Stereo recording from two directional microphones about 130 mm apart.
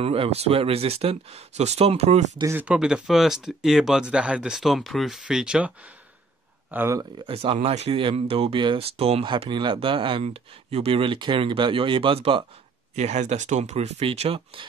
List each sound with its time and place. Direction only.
0.0 s speech: 45° right (ahead or behind)
2.5 s speech: 10° right (ahead or behind)
6.7 s speech: 15° right (ahead or behind)
7.2 s speech: 45° right (ahead or behind)
7.5 s speech: 55° right (ahead or behind)
12.9 s speech: 60° right (ahead or behind); by 14.7 s 45° right (ahead or behind)